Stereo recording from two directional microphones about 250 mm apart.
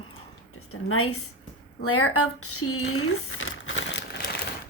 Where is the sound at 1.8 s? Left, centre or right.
Left.